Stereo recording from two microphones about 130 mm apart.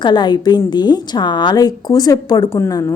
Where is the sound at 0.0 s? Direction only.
35° left (ahead or behind).